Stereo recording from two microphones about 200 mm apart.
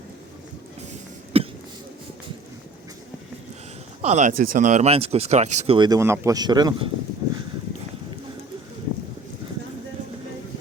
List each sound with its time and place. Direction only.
1.3 s throat clearing: 30° right (ahead or behind)
4.0 s speech: 35° right (ahead or behind)